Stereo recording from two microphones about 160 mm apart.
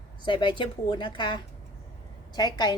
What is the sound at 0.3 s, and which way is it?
A woman's voice, 30° left (ahead or behind).